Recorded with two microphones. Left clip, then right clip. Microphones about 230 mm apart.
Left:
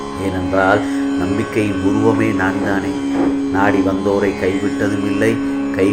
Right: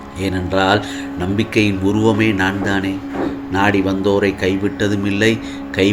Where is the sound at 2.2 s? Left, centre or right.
Right.